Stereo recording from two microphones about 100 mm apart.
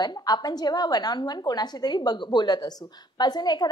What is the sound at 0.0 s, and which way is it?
A woman's voice, 45° left (ahead or behind).